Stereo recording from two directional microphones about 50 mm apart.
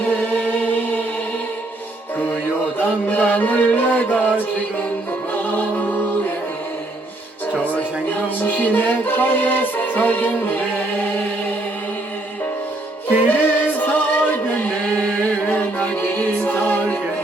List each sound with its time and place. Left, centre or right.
0.0 s music: left
2.7 s music: left
7.5 s speech: left
13.2 s chant: left
15.4 s music: left